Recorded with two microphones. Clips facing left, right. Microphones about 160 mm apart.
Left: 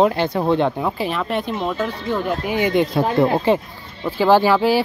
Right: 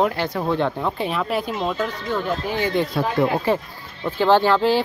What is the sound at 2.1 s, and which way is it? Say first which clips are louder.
Speech: left 3 dB; 10° left (ahead or behind).